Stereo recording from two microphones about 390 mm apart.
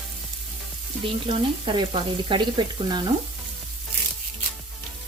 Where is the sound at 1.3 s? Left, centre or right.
Centre.